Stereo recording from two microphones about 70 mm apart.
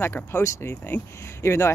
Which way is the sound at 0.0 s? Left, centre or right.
Left.